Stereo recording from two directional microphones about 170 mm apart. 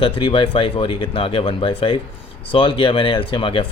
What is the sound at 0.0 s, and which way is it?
Speech, 30° left (ahead or behind).